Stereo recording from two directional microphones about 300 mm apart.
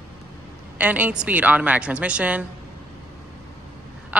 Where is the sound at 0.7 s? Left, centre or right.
Centre.